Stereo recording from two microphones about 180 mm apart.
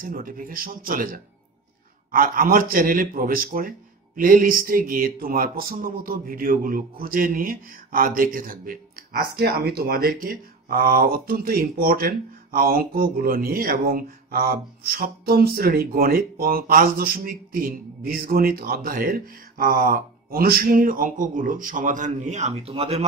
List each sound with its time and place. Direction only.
0.0 s speech: 50° right (ahead or behind)
9.4 s speech: 60° right (ahead or behind); by 23.0 s 35° right (ahead or behind)